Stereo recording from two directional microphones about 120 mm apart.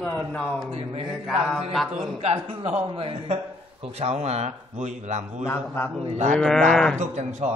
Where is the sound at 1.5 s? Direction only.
Centre (ahead or behind).